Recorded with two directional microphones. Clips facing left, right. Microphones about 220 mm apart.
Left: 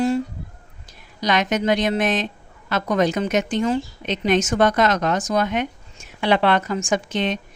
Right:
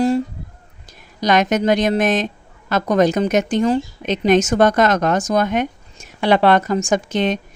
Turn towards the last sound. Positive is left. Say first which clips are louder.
# right 4 dB
turn(degrees=-45)  # may be behind; listen again after turning